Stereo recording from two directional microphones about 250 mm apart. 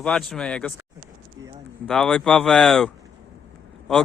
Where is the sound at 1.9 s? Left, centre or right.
Centre.